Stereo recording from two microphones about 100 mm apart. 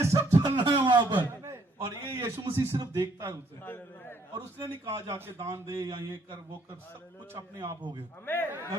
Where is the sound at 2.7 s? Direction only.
40° right (ahead or behind).